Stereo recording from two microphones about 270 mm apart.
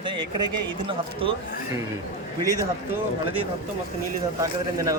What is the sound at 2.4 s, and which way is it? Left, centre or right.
Speech, centre.